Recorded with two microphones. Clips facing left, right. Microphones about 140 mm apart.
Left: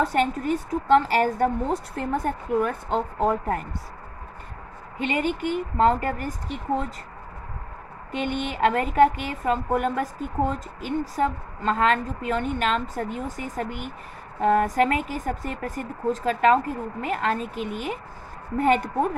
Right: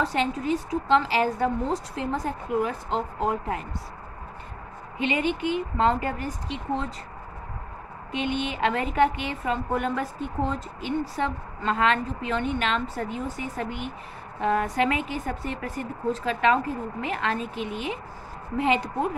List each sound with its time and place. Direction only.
0.0 s a woman's voice: 50° left (ahead or behind)
4.9 s a woman's voice: 40° left (ahead or behind)
8.1 s a woman's voice: 45° left (ahead or behind)